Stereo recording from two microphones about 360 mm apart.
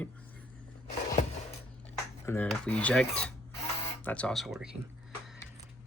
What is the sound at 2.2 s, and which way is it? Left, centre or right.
Speech, centre.